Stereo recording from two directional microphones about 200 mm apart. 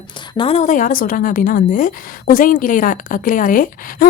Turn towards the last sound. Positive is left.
turn(degrees=45)  # may be behind; listen again after turning